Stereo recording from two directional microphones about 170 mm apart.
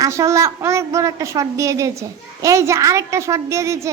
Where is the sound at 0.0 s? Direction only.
20° right (ahead or behind).